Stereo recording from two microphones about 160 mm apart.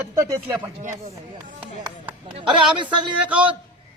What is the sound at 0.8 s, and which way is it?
Speech, 45° right (ahead or behind).